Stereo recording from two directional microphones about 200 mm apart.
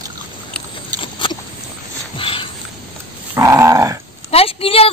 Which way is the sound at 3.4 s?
15° right (ahead or behind).